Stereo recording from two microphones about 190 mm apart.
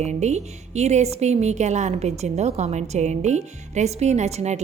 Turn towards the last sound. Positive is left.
turn(degrees=-35)  # may be behind; listen again after turning